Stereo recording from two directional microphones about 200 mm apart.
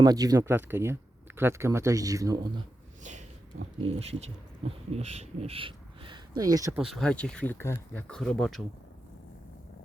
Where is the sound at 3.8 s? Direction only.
30° right (ahead or behind).